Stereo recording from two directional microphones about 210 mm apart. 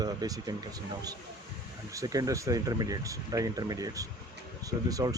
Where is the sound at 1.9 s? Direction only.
15° right (ahead or behind).